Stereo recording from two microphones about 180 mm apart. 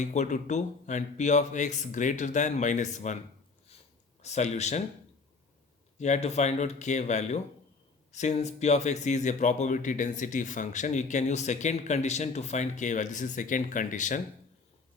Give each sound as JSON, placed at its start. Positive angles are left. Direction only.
{"t": 0.0, "sound": "speech", "side_deg": 40}
{"t": 4.2, "sound": "speech", "side_deg": 40}
{"t": 6.0, "sound": "speech", "side_deg": 40}